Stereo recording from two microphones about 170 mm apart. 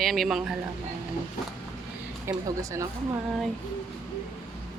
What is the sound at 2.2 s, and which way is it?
Speech, 20° right (ahead or behind).